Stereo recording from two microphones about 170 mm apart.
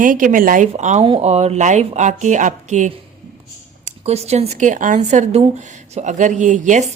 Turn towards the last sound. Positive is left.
turn(degrees=-45)  # may be behind; listen again after turning